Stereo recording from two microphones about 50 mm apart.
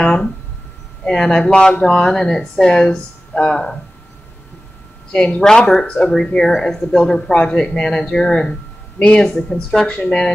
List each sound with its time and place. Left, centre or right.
0.0 s a sound: centre
1.0 s speech: centre
5.1 s speech: left
5.4 s speech: centre
8.9 s speech: left
9.2 s speech: centre